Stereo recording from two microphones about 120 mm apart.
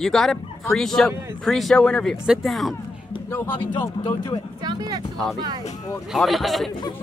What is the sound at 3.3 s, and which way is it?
Speech, 15° left (ahead or behind).